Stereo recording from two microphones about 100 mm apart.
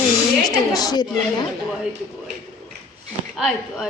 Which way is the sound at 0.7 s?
40° left (ahead or behind).